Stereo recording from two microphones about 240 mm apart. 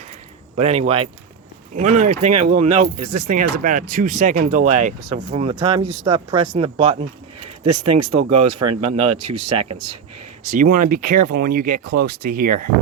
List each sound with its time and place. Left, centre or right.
0.5 s speech: right
10.4 s speech: right